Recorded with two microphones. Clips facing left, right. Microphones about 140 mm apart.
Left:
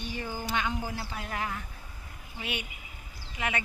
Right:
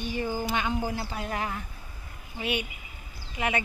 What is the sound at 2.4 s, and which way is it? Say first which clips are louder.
Speech: right 6 dB; 15° right (ahead or behind).